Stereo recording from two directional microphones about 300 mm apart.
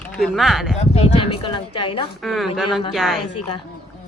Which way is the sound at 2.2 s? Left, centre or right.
Centre.